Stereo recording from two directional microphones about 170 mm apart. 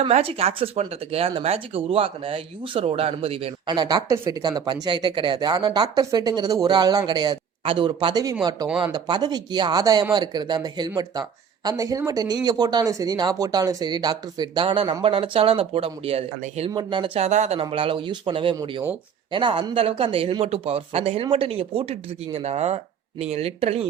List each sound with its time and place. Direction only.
0.0 s speech: 35° right (ahead or behind)
17.6 s speech: 30° right (ahead or behind)